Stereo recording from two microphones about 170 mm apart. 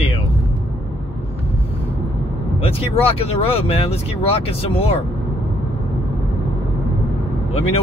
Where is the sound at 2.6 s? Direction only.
35° left (ahead or behind).